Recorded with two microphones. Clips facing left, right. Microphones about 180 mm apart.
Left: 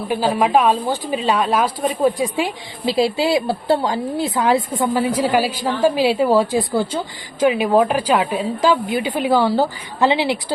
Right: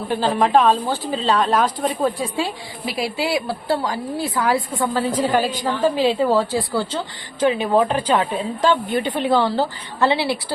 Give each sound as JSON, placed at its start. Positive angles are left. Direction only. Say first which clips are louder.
{"t": 0.1, "sound": "a woman's voice", "louder": "left 1 dB", "side_deg": 10}
{"t": 2.8, "sound": "a woman's voice", "louder": "left 6 dB", "side_deg": 25}
{"t": 4.8, "sound": "a woman's voice", "louder": "left 2 dB", "side_deg": 10}